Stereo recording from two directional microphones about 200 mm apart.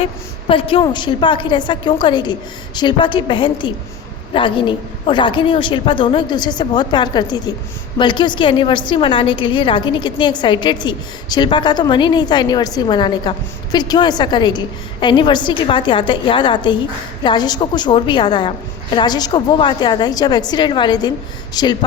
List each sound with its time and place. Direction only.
0.0 s a woman's voice: 25° left (ahead or behind)